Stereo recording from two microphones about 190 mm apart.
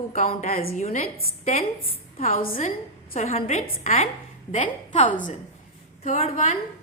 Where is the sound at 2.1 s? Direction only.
35° left (ahead or behind).